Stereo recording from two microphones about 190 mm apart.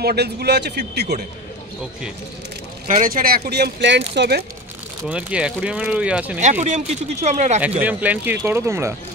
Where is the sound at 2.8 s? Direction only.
45° right (ahead or behind); by 4.4 s 65° right (ahead or behind).